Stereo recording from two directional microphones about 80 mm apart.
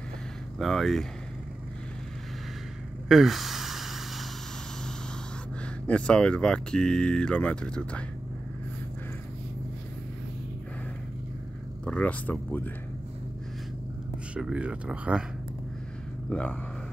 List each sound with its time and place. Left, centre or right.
0.6 s speech: centre
3.1 s a sound: centre
5.9 s speech: centre
11.8 s speech: centre
14.3 s speech: centre
16.3 s speech: centre